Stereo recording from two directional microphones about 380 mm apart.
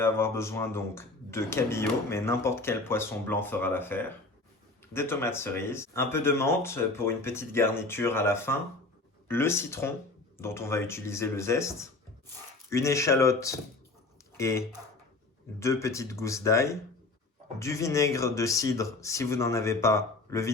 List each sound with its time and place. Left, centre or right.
0.0 s speech: centre
15.6 s speech: centre